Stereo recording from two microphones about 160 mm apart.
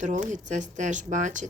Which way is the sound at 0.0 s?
50° right (ahead or behind).